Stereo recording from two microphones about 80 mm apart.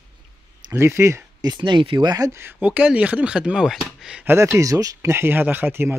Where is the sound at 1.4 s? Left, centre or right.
Right.